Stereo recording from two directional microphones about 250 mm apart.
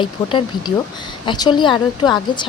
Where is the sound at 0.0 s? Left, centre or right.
Centre.